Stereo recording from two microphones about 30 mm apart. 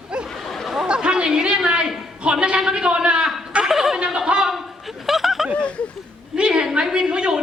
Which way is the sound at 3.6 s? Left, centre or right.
Centre.